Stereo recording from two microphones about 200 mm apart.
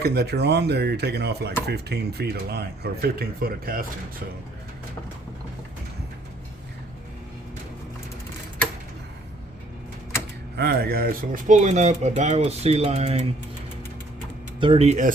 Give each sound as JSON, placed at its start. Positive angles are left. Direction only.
{"t": 0.0, "sound": "speech", "side_deg": -55}
{"t": 10.6, "sound": "speech", "side_deg": -50}
{"t": 14.6, "sound": "speech", "side_deg": -30}